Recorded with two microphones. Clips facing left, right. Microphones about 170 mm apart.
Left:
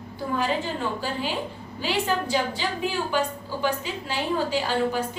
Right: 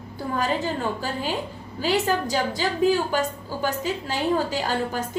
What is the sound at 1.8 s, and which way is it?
A woman's voice, 40° right (ahead or behind).